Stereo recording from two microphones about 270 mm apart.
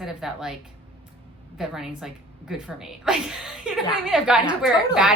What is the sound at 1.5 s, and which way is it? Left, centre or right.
A woman's voice, centre.